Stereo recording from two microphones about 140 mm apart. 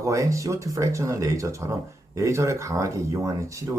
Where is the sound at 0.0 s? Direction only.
25° right (ahead or behind).